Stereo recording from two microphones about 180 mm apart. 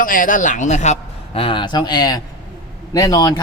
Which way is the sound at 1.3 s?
30° left (ahead or behind).